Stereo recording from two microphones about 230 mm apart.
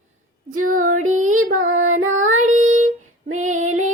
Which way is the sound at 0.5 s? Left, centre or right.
Right.